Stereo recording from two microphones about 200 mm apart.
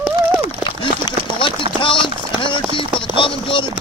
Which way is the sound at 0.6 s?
25° left (ahead or behind).